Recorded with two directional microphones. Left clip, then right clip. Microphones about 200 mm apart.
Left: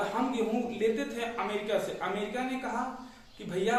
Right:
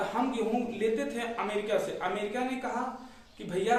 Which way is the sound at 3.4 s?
20° right (ahead or behind).